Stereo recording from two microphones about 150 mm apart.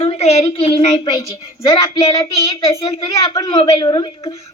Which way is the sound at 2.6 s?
35° left (ahead or behind).